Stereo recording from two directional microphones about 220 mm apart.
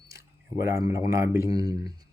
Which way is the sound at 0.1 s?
15° right (ahead or behind).